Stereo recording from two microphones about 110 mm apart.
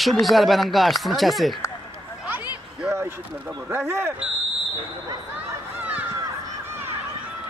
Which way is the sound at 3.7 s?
20° right (ahead or behind).